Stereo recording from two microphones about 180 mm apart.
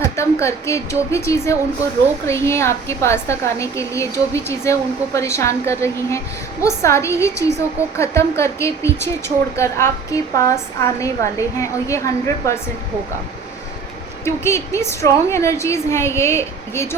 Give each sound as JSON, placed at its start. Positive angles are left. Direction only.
{"t": 0.2, "sound": "a woman's voice", "side_deg": 15}
{"t": 14.3, "sound": "a woman's voice", "side_deg": 15}